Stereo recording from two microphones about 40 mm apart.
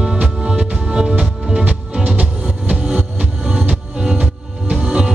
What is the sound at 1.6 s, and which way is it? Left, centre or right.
Music, right.